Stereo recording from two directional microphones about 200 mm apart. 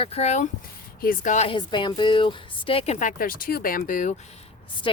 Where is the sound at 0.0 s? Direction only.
30° left (ahead or behind).